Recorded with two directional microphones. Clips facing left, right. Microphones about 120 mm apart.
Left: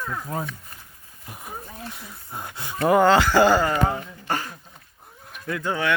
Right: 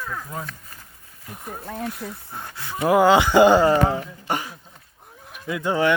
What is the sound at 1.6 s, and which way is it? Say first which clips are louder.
Speech: right 9 dB; 70° right (ahead or behind).